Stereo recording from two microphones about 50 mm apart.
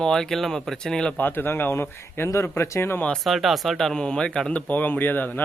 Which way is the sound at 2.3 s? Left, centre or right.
Left.